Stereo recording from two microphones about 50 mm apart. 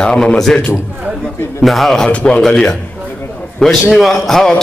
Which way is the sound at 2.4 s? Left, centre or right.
Centre.